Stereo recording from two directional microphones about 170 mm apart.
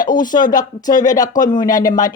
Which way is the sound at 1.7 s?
50° left (ahead or behind).